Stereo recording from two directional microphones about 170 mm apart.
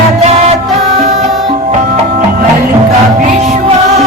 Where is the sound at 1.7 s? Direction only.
45° right (ahead or behind).